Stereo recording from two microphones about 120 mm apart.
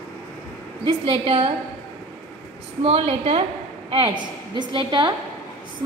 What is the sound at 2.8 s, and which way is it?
Speech, 55° right (ahead or behind).